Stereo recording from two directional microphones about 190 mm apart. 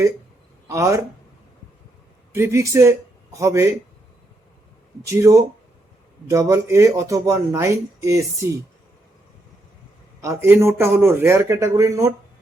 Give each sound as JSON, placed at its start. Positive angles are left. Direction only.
{"t": 0.7, "sound": "speech", "side_deg": -15}
{"t": 2.3, "sound": "speech", "side_deg": -15}
{"t": 5.0, "sound": "speech", "side_deg": -15}
{"t": 10.2, "sound": "speech", "side_deg": -15}